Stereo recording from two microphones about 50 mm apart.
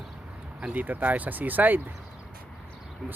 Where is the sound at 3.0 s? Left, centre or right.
Right.